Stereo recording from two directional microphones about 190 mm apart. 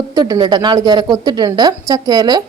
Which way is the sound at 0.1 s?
20° right (ahead or behind).